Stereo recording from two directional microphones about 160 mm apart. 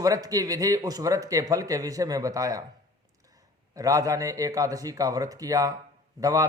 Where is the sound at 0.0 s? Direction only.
20° right (ahead or behind).